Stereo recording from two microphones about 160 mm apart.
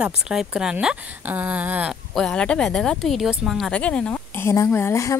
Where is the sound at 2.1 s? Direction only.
5° left (ahead or behind).